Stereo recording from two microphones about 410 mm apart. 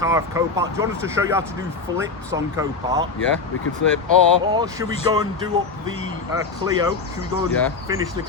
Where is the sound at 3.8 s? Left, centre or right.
Left.